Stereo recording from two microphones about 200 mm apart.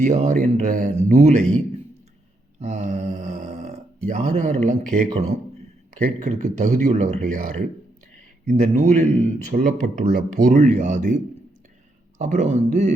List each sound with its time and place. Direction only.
0.0 s a man's voice: 35° right (ahead or behind)
6.0 s a man's voice: 40° right (ahead or behind)
12.2 s a man's voice: 35° right (ahead or behind)